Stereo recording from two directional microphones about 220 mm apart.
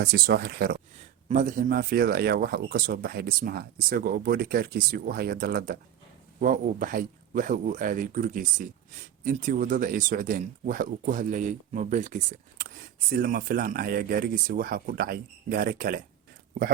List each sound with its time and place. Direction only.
0.0 s speech: 45° right (ahead or behind)